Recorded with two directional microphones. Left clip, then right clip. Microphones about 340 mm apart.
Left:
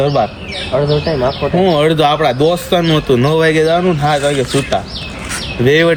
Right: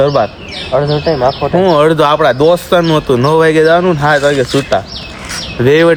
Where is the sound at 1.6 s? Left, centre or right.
Centre.